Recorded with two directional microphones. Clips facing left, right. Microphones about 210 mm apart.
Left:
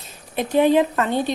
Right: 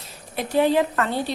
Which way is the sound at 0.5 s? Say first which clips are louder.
Left 3 dB; 15° left (ahead or behind).